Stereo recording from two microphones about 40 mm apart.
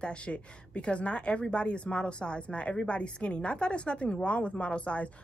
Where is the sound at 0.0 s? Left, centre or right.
Left.